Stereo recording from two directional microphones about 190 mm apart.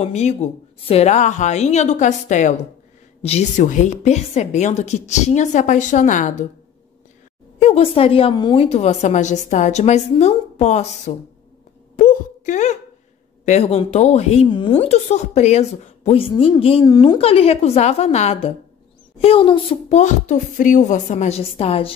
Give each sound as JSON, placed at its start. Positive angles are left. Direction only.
{"t": 0.0, "sound": "a woman's voice", "side_deg": 35}
{"t": 7.5, "sound": "a woman's voice", "side_deg": 35}
{"t": 12.0, "sound": "a sound", "side_deg": 45}
{"t": 13.5, "sound": "a woman's voice", "side_deg": 35}